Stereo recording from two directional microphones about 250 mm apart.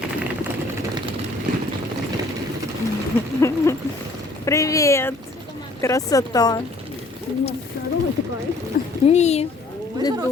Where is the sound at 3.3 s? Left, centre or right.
Centre.